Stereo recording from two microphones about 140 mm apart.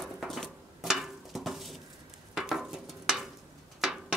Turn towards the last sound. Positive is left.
turn(degrees=-5)  # may be behind; listen again after turning